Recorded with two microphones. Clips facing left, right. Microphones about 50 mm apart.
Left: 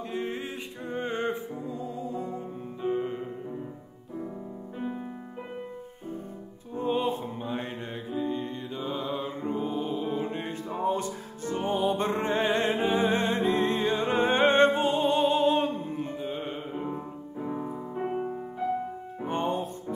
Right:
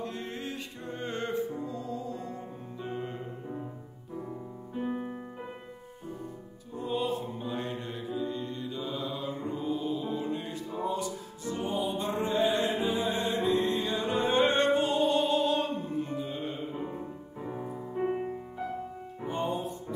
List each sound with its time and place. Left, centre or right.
0.0 s music: centre
6.7 s music: left
19.2 s music: left